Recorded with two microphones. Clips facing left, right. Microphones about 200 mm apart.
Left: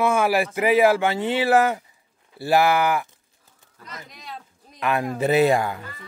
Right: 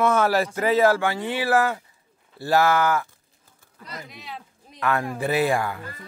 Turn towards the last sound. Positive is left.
turn(degrees=20)  # may be behind; listen again after turning